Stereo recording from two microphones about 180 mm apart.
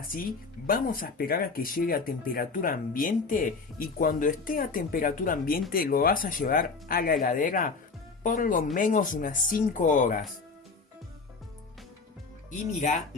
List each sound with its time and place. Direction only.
0.7 s speech: 50° left (ahead or behind)
12.5 s speech: 45° left (ahead or behind)